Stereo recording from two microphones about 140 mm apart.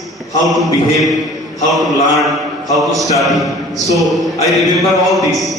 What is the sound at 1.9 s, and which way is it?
Mantra, 25° left (ahead or behind).